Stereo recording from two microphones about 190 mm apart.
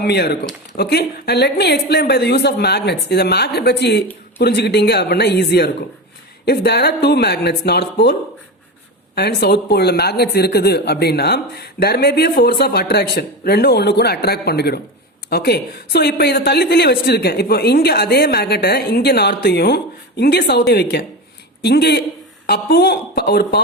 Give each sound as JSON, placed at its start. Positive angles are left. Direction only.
{"t": 0.0, "sound": "speech", "side_deg": 60}
{"t": 9.1, "sound": "speech", "side_deg": 60}